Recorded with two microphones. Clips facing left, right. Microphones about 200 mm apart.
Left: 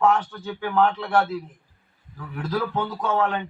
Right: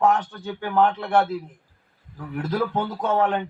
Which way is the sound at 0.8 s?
20° right (ahead or behind).